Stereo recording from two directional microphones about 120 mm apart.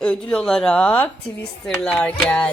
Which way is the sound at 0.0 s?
10° left (ahead or behind).